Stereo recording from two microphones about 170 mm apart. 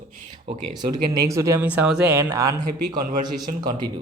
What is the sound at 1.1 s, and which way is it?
Speech, 20° right (ahead or behind).